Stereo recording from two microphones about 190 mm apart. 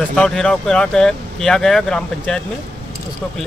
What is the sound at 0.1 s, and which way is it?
Speech, 5° left (ahead or behind).